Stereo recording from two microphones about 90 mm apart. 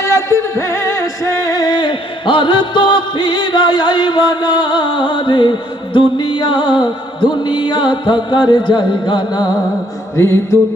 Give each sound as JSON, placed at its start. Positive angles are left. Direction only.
{"t": 0.0, "sound": "music", "side_deg": 35}
{"t": 10.2, "sound": "mantra", "side_deg": 30}